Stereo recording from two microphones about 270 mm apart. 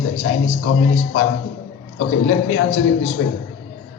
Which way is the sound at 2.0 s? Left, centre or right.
Left.